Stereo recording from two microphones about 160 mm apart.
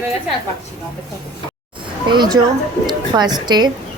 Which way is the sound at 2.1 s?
25° right (ahead or behind).